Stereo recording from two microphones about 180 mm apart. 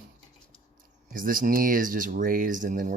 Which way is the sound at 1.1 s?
50° right (ahead or behind).